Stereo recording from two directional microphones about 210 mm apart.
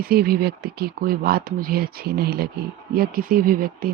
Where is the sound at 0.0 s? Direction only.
45° right (ahead or behind).